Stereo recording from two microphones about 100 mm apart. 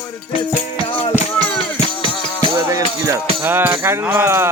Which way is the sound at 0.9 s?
60° left (ahead or behind).